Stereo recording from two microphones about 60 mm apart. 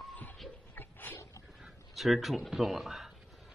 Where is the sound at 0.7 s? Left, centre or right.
Left.